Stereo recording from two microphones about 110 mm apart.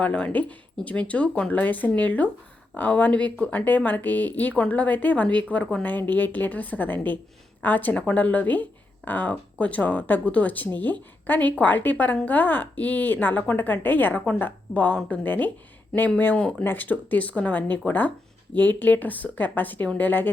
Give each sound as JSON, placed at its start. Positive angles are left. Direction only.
{"t": 0.0, "sound": "a woman's voice", "side_deg": 10}